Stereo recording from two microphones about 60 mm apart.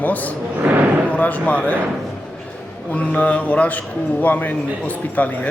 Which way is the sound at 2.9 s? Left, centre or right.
Left.